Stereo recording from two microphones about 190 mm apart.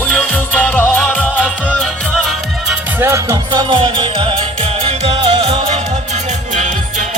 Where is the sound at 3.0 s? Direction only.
15° right (ahead or behind).